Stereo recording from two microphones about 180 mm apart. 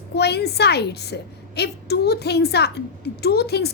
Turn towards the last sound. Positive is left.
turn(degrees=65)  # may be behind; listen again after turning